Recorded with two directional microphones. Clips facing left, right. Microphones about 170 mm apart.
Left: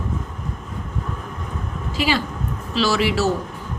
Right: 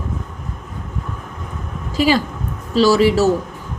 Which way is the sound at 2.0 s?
40° right (ahead or behind).